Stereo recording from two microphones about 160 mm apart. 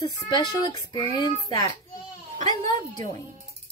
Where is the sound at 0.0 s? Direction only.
25° left (ahead or behind).